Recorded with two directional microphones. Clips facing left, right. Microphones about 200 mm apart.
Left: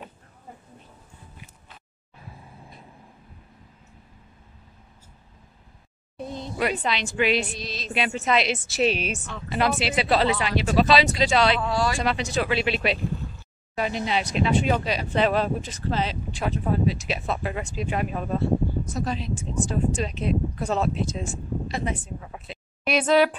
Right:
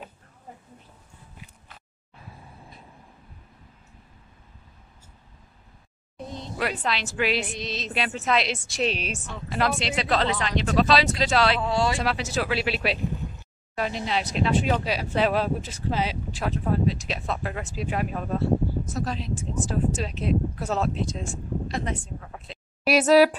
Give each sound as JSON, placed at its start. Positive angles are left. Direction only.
{"t": 6.7, "sound": "speech", "side_deg": 0}
{"t": 7.4, "sound": "music", "side_deg": -20}
{"t": 7.9, "sound": "speech", "side_deg": 0}
{"t": 11.7, "sound": "music", "side_deg": -25}
{"t": 12.0, "sound": "speech", "side_deg": -5}
{"t": 22.8, "sound": "speech", "side_deg": -5}